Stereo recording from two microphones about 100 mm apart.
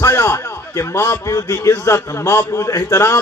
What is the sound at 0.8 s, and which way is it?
A man's voice, 25° left (ahead or behind).